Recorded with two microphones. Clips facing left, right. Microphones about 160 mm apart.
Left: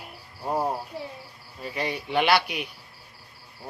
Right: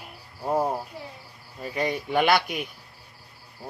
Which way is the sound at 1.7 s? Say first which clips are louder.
Right 2 dB; 45° right (ahead or behind).